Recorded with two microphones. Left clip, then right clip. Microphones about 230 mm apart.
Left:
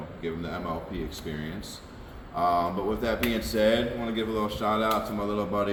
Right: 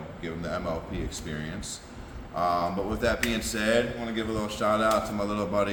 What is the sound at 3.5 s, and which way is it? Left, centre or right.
A man's voice, centre.